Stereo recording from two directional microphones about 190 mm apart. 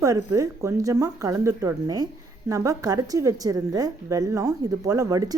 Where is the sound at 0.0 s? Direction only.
15° right (ahead or behind).